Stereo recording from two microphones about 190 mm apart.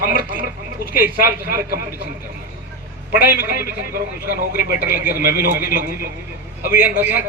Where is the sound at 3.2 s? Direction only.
50° left (ahead or behind).